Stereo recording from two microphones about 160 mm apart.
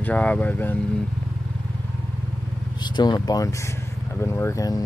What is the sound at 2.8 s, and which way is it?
Speech, 30° left (ahead or behind).